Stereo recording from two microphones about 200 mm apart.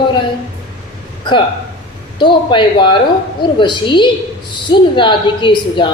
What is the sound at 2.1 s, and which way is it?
A woman's voice, 25° left (ahead or behind).